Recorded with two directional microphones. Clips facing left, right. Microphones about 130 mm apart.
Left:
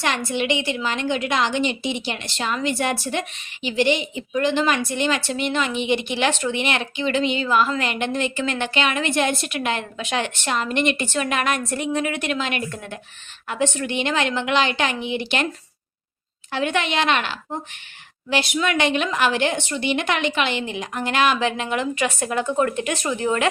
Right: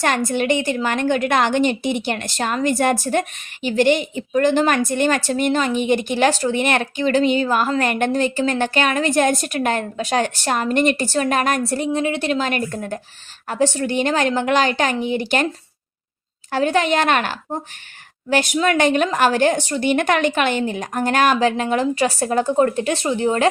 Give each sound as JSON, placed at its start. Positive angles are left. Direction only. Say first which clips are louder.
{"t": 0.0, "sound": "a woman's voice", "louder": "right 4 dB", "side_deg": -45}
{"t": 16.5, "sound": "a woman's voice", "louder": "right 5 dB", "side_deg": -40}